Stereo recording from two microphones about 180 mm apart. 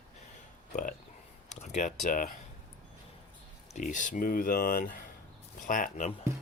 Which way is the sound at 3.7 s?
45° left (ahead or behind).